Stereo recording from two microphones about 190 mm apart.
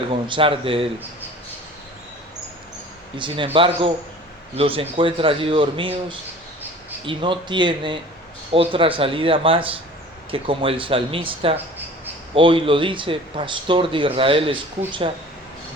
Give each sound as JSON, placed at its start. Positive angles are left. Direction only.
{"t": 0.1, "sound": "speech", "side_deg": -25}
{"t": 3.2, "sound": "speech", "side_deg": -25}
{"t": 7.0, "sound": "speech", "side_deg": -25}